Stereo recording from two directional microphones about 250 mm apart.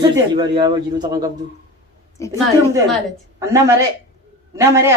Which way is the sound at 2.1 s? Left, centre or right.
Centre.